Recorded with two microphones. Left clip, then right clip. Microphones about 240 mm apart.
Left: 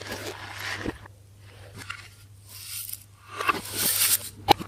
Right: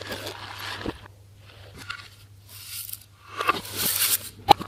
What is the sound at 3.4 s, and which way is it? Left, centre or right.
Scrape, centre.